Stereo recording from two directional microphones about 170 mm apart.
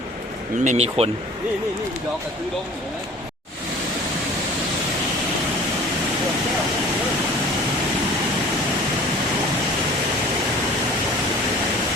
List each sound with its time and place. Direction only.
0.6 s speech: 40° right (ahead or behind)